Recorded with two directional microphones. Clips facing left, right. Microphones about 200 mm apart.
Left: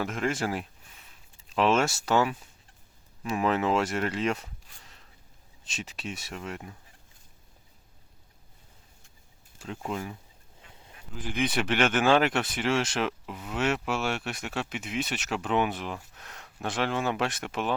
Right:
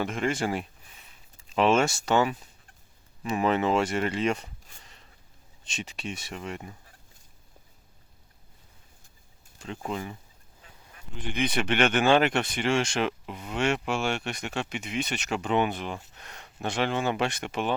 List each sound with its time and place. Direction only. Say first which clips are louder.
0.0 s speech: right 1 dB; centre (ahead or behind)
9.6 s speech: even; centre (ahead or behind)